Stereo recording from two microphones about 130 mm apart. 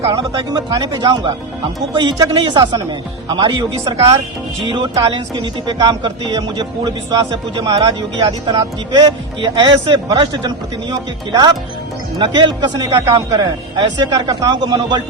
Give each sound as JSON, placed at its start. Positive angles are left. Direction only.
{"t": 0.0, "sound": "speech", "side_deg": -40}
{"t": 7.8, "sound": "speech", "side_deg": -40}